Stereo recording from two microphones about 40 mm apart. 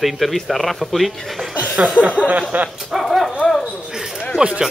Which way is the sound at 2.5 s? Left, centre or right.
Right.